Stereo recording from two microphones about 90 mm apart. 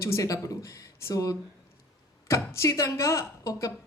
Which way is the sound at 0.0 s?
35° left (ahead or behind).